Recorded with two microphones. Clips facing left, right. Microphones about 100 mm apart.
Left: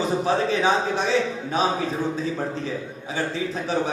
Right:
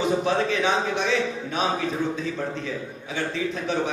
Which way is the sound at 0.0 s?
35° left (ahead or behind).